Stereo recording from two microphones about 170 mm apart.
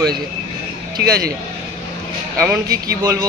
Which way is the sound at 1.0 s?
85° right.